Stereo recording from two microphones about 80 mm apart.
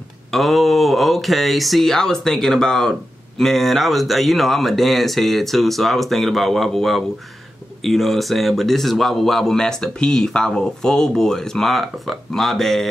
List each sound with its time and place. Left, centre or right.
0.3 s speech: centre